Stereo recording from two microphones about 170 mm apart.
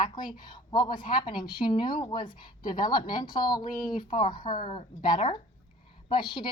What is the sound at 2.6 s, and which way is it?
Speech, 55° left (ahead or behind).